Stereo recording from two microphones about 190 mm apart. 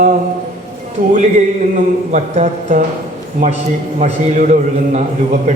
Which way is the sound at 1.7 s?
40° right (ahead or behind).